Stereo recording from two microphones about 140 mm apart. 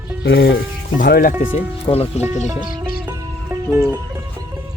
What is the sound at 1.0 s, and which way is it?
Speech, 90° left.